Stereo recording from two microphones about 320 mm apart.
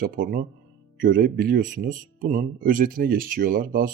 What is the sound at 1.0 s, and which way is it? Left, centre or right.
Speech, right.